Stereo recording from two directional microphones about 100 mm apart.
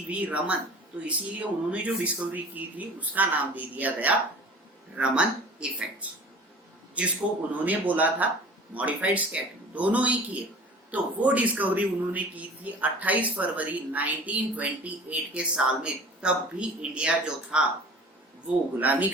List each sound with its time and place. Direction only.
0.1 s speech: 15° right (ahead or behind)
18.8 s speech: 15° right (ahead or behind)